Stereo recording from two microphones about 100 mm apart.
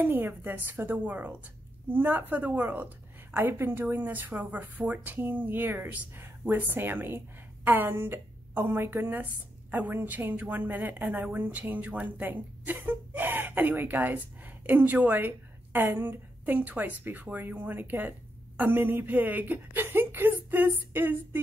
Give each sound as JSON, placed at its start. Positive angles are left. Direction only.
{"t": 0.0, "sound": "a woman's voice", "side_deg": -20}